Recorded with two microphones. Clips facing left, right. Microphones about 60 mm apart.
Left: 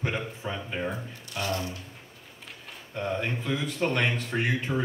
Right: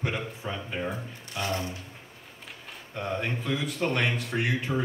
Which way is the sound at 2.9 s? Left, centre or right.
Centre.